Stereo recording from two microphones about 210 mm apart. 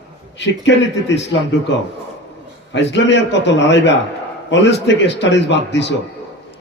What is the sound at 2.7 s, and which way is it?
A man's voice, 60° left (ahead or behind).